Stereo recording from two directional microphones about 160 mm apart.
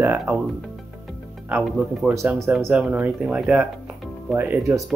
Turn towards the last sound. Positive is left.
turn(degrees=-15)  # may be behind; listen again after turning